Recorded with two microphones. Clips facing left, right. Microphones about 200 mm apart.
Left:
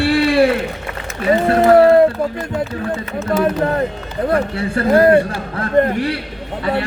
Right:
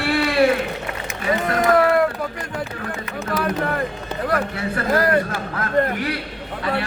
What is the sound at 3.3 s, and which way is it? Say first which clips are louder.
Speech: left 6 dB; 25° left (ahead or behind).